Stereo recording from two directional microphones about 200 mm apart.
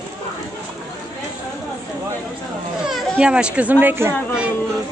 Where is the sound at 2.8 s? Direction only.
5° right (ahead or behind).